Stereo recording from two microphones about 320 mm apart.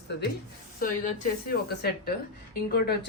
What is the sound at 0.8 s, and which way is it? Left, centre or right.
A woman's voice, left.